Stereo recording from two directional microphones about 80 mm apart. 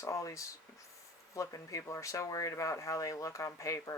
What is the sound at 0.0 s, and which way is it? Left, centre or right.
Speech, left.